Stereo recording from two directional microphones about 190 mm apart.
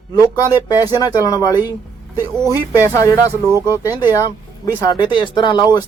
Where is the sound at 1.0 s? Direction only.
20° left (ahead or behind).